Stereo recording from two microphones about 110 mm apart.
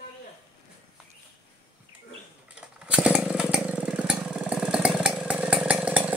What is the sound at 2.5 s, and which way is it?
Motorcycle, 10° right (ahead or behind).